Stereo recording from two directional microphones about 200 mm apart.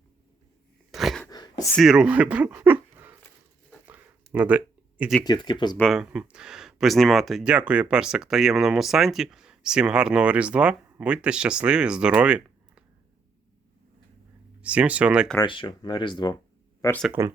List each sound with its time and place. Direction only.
0.9 s a sound: centre (ahead or behind)
1.3 s a sound: 20° left (ahead or behind)
1.7 s speech: centre (ahead or behind)
3.7 s a sound: 10° right (ahead or behind)
5.2 s speech: 20° left (ahead or behind)
5.7 s speech: centre (ahead or behind)
14.6 s speech: 5° right (ahead or behind)
15.4 s speech: 25° left (ahead or behind)
17.0 s speech: 10° right (ahead or behind)